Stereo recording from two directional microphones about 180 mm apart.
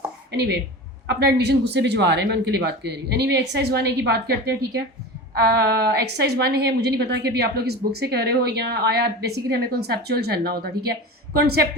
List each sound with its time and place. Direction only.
1.0 s a woman's voice: 65° right (ahead or behind)